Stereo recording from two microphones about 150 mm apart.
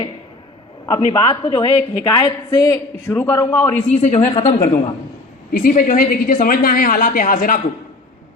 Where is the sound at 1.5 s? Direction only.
30° left (ahead or behind); by 3.7 s 15° left (ahead or behind).